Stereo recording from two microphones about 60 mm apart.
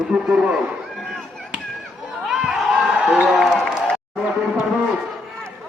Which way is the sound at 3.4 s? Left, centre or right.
Centre.